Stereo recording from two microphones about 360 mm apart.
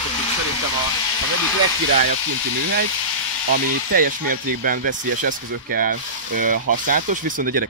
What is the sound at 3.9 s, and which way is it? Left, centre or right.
Speech, right.